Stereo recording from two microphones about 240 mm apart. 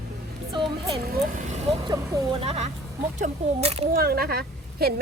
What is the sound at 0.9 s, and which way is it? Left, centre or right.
Speech, right.